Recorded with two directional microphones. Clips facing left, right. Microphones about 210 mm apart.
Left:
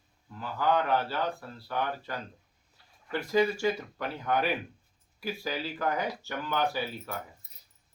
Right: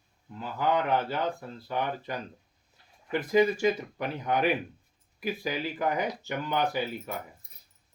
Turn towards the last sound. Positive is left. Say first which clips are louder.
# right 3 dB
turn(degrees=-15)  # may be behind; listen again after turning